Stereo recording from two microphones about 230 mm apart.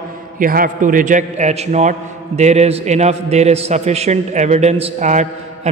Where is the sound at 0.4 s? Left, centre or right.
Right.